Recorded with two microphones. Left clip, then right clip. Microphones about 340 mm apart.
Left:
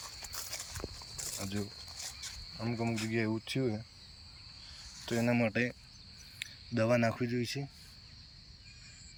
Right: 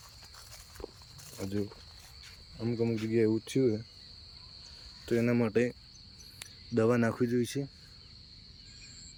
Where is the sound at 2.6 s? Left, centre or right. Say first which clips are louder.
Right 4 dB; centre.